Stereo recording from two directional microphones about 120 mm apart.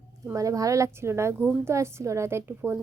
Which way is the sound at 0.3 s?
30° right (ahead or behind).